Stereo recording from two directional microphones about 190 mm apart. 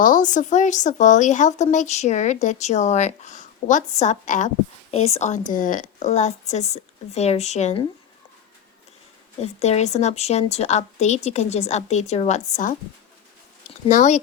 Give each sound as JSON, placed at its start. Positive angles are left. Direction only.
{"t": 0.0, "sound": "speech", "side_deg": 45}
{"t": 9.4, "sound": "speech", "side_deg": 35}